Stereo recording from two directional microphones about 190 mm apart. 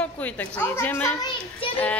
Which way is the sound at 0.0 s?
10° left (ahead or behind).